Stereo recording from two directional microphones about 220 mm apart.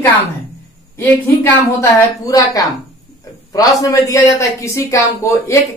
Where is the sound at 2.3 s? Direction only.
15° left (ahead or behind).